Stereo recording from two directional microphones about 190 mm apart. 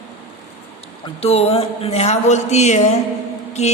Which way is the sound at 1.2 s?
30° left (ahead or behind).